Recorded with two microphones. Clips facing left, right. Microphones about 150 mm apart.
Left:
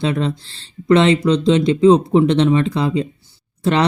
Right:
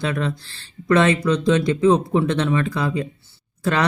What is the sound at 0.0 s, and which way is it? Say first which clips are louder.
Speech: left 4 dB; 25° left (ahead or behind).